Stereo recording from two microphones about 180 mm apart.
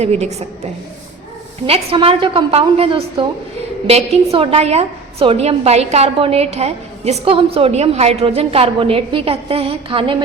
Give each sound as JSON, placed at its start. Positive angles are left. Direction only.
{"t": 0.0, "sound": "a woman's voice", "side_deg": -35}